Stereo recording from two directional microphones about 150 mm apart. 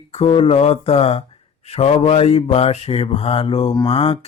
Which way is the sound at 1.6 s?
45° left (ahead or behind).